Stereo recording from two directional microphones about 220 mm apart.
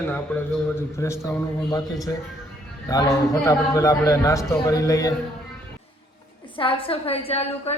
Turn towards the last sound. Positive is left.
turn(degrees=25)  # may be behind; listen again after turning